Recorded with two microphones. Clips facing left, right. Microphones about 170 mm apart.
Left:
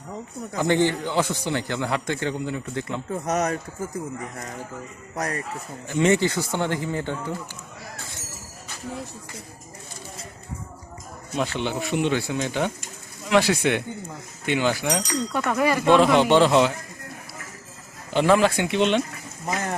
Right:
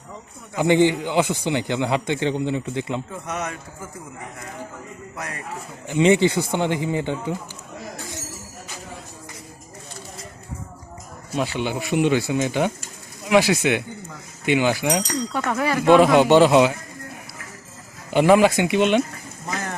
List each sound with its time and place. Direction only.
0.5 s speech: 20° right (ahead or behind)
3.2 s speech: 40° left (ahead or behind)
5.1 s speech: 40° left (ahead or behind)
5.9 s speech: 15° right (ahead or behind)
11.3 s speech: 5° right (ahead or behind)
18.1 s speech: 10° right (ahead or behind)